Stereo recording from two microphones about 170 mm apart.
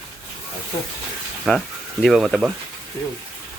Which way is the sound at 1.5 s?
Centre (ahead or behind).